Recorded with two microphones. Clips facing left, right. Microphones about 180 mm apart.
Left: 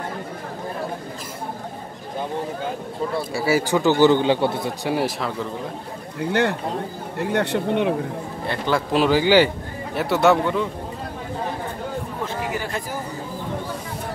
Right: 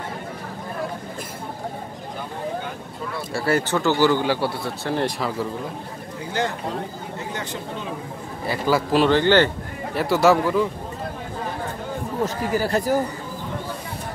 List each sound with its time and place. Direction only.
3.3 s a man's voice: 5° left (ahead or behind)
3.8 s speech: 20° left (ahead or behind)
4.9 s a man's voice: centre (ahead or behind)
6.1 s speech: 60° left (ahead or behind)
8.5 s a man's voice: 5° right (ahead or behind)
12.4 s speech: 40° right (ahead or behind)